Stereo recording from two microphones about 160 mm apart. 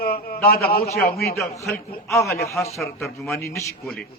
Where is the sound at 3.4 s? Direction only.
20° left (ahead or behind).